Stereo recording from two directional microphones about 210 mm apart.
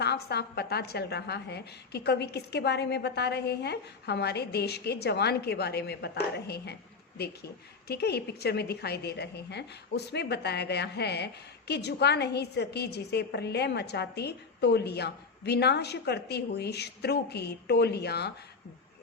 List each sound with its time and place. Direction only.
0.0 s a woman's voice: 50° left (ahead or behind)